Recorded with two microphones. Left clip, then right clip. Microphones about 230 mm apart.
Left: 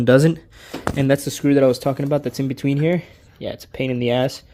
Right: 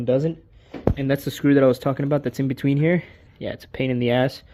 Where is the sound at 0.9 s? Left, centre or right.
Left.